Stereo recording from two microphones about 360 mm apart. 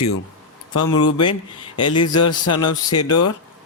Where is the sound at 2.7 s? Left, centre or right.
Left.